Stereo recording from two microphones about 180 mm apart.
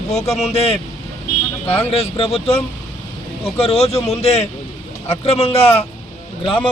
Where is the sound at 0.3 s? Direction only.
35° left (ahead or behind).